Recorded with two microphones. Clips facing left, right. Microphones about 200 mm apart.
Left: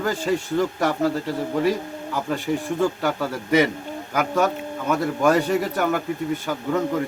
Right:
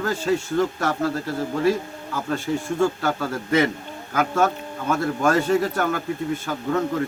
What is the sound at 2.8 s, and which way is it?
Speech, 15° left (ahead or behind).